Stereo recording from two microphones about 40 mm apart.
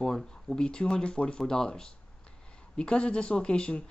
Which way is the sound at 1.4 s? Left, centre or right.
Centre.